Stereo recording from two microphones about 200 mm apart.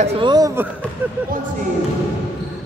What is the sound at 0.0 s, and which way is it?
Speech, 20° right (ahead or behind).